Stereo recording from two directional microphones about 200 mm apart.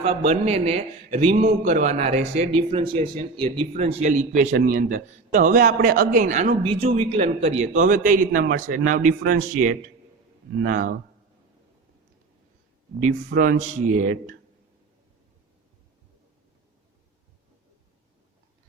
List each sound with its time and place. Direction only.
0.3 s a man's voice: 30° right (ahead or behind)
10.6 s a man's voice: 40° right (ahead or behind)
13.0 s a man's voice: 45° right (ahead or behind)